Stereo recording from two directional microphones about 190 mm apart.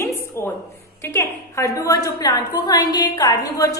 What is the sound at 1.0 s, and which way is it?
A woman's voice, 15° left (ahead or behind).